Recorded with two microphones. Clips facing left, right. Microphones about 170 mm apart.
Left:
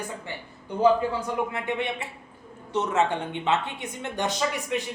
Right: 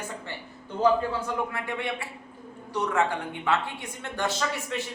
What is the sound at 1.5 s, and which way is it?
A man's voice, 20° left (ahead or behind).